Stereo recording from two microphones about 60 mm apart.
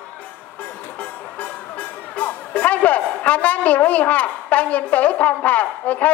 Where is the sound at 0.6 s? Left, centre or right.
Left.